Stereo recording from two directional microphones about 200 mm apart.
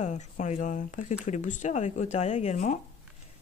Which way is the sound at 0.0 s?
35° left (ahead or behind).